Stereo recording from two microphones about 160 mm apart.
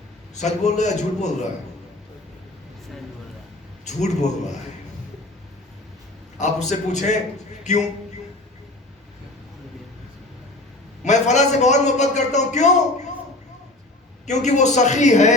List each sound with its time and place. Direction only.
0.3 s a man's voice: 45° left (ahead or behind)
3.8 s a man's voice: 45° left (ahead or behind)
6.4 s a man's voice: 45° left (ahead or behind)
11.0 s a man's voice: 45° left (ahead or behind)
14.3 s a man's voice: 45° left (ahead or behind)